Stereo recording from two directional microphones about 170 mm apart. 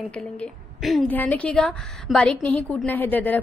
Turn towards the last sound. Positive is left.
turn(degrees=10)  # may be behind; listen again after turning